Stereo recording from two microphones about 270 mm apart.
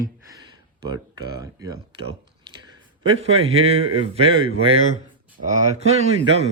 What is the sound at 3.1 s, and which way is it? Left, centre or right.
A man's voice, right.